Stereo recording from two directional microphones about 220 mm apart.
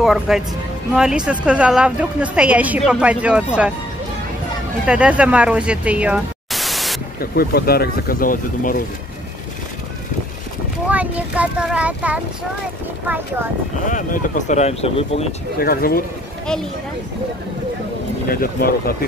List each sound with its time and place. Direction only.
0.0 s a woman's voice: centre (ahead or behind)
4.8 s speech: 5° right (ahead or behind)
7.2 s speech: 45° left (ahead or behind)
10.9 s a woman's voice: 5° right (ahead or behind)
13.8 s speech: 35° left (ahead or behind)
15.6 s speech: 45° left (ahead or behind)
18.3 s speech: 45° left (ahead or behind)